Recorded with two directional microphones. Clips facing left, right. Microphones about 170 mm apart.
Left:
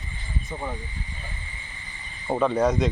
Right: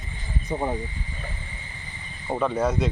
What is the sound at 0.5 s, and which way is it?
Speech, 40° right (ahead or behind).